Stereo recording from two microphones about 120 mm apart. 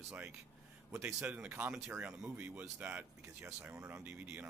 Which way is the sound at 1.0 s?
10° right (ahead or behind).